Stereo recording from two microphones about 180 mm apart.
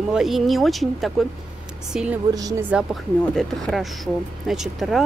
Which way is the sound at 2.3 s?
20° right (ahead or behind).